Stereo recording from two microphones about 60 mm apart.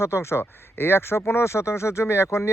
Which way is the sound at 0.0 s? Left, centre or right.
Left.